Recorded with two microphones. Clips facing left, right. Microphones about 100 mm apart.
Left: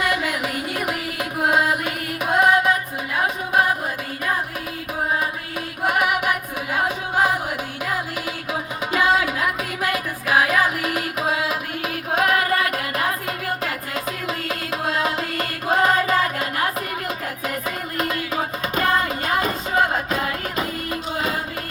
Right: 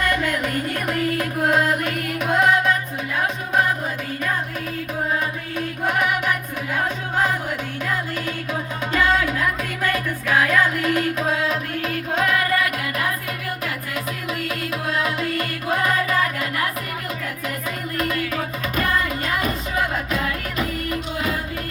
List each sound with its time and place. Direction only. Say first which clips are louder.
0.0 s music: right 1 dB; 5° left (ahead or behind)
5.5 s music: left 1 dB; 10° left (ahead or behind)
8.9 s music: left 1 dB; 10° left (ahead or behind)
12.5 s music: even; 30° left (ahead or behind)
17.9 s music: right 1 dB; 20° left (ahead or behind)